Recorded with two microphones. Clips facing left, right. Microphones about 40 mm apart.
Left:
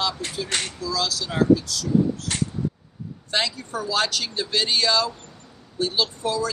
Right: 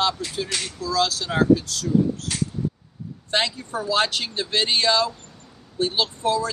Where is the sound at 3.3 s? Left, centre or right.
Right.